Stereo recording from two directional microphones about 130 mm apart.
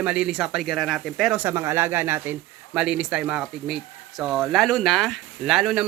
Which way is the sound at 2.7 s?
5° right (ahead or behind).